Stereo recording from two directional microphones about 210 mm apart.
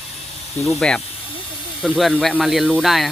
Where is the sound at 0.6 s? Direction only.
5° left (ahead or behind).